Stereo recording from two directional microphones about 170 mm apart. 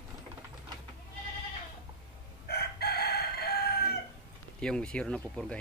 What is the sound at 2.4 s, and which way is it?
Chicken, 70° left (ahead or behind).